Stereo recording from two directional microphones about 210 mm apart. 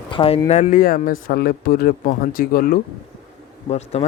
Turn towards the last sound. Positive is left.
turn(degrees=30)  # may be behind; listen again after turning